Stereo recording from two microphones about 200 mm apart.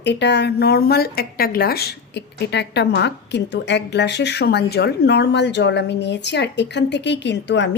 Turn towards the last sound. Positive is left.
turn(degrees=60)  # may be behind; listen again after turning